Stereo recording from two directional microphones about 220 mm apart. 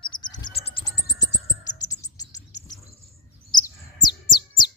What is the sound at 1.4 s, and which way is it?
Bird, 15° left (ahead or behind).